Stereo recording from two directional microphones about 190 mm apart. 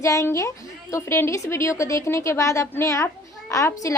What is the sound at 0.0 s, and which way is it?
A woman's voice, 15° left (ahead or behind).